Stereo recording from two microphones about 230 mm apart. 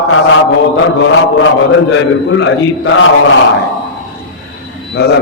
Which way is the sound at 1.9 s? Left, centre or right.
Left.